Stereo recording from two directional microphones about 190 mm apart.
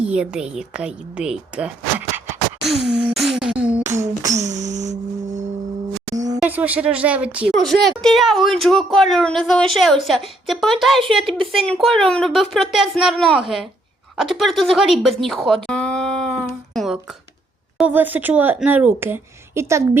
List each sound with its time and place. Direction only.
0.0 s a woman's voice: 5° right (ahead or behind)
2.1 s beatboxing: centre (ahead or behind)
4.4 s music: 40° right (ahead or behind)
6.1 s a sound: 20° right (ahead or behind)
6.4 s a woman's voice: 5° right (ahead or behind)
11.3 s speech: 30° right (ahead or behind)
11.6 s a woman's voice: 5° left (ahead or behind)
14.2 s a sound: centre (ahead or behind)
17.7 s speech: 10° right (ahead or behind)